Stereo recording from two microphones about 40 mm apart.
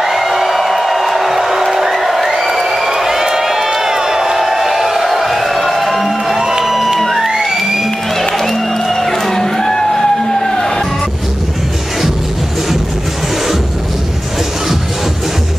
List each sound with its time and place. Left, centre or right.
0.0 s music: centre
6.3 s music: centre
6.7 s music: centre
7.0 s music: centre
7.2 s music: centre
8.5 s music: centre